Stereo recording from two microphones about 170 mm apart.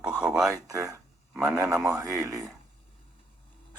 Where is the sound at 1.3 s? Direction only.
5° right (ahead or behind).